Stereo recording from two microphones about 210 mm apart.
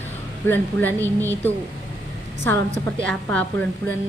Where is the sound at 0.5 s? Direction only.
10° left (ahead or behind).